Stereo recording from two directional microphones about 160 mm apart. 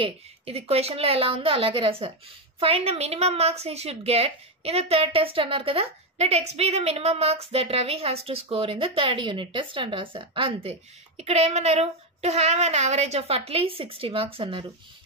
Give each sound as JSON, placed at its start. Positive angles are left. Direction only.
{"t": 0.0, "sound": "a woman's voice", "side_deg": -40}